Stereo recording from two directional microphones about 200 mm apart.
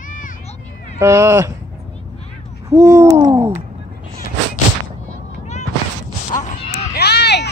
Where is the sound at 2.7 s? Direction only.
15° right (ahead or behind).